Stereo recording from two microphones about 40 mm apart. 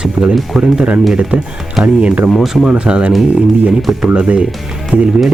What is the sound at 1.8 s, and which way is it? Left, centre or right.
Speech, right.